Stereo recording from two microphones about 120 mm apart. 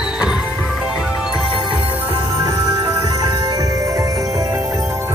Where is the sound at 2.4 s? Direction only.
25° right (ahead or behind).